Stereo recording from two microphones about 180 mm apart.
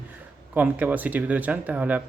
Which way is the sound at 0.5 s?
10° right (ahead or behind).